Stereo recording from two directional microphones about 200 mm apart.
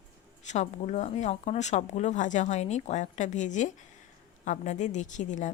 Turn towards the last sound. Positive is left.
turn(degrees=35)  # may be behind; listen again after turning